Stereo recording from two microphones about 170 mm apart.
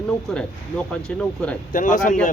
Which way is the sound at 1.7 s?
50° left (ahead or behind).